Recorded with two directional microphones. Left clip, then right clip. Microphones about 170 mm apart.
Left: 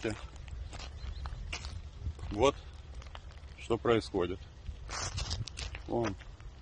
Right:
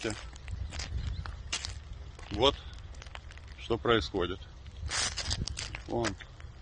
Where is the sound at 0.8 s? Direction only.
50° right (ahead or behind).